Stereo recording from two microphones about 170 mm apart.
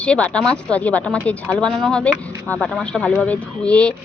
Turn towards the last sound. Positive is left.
turn(degrees=5)  # may be behind; listen again after turning